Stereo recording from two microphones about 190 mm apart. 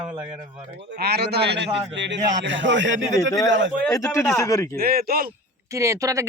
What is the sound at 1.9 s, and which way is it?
A man's voice, 70° right (ahead or behind).